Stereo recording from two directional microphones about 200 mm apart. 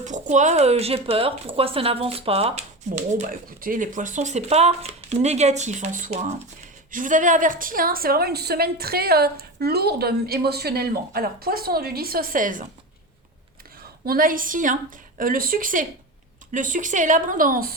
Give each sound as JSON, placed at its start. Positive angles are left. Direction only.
{"t": 0.0, "sound": "speech", "side_deg": -35}
{"t": 3.1, "sound": "a woman's voice", "side_deg": -40}
{"t": 14.0, "sound": "a woman's voice", "side_deg": -45}